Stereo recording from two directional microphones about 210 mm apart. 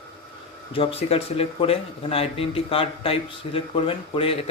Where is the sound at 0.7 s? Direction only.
25° left (ahead or behind).